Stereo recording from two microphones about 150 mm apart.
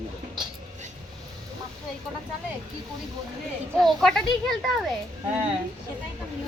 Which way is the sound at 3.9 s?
Centre (ahead or behind).